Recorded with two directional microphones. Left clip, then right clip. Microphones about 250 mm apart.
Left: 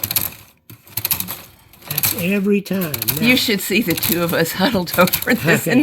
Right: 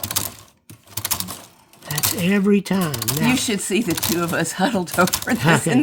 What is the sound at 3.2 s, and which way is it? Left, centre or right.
Speech, centre.